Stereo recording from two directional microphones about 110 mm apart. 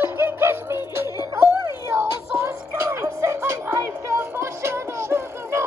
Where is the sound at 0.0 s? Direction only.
20° right (ahead or behind).